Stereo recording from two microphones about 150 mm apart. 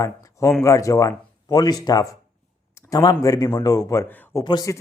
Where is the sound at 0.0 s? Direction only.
20° left (ahead or behind).